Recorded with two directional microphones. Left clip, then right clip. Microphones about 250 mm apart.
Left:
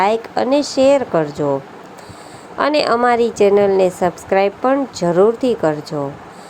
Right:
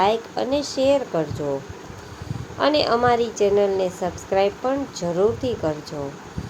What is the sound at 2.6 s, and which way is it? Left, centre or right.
A woman's voice, left.